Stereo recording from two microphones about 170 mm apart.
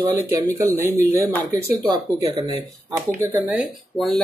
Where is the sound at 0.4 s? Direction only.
20° right (ahead or behind).